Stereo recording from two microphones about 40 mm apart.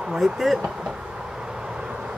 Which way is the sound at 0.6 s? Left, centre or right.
Centre.